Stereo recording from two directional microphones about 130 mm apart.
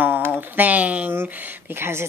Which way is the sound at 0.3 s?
15° right (ahead or behind).